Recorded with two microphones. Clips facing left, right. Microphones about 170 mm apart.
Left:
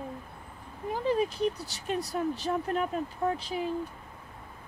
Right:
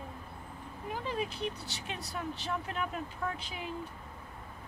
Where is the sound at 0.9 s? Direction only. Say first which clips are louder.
Left 8 dB; 40° left (ahead or behind).